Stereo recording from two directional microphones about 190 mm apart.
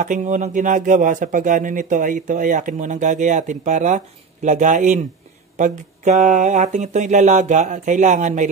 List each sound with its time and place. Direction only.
0.0 s speech: 40° right (ahead or behind)